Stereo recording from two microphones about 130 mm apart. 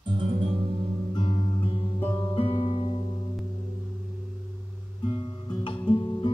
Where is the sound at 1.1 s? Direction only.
45° left (ahead or behind).